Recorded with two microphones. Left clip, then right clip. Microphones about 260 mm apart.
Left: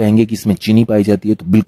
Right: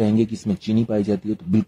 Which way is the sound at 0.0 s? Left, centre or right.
Left.